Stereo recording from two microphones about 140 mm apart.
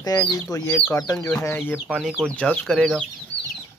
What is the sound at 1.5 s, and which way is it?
Speech, 15° left (ahead or behind).